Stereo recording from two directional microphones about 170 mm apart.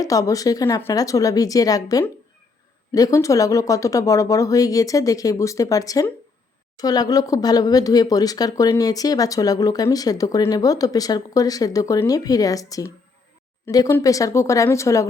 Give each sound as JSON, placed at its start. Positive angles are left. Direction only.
{"t": 0.0, "sound": "speech", "side_deg": 20}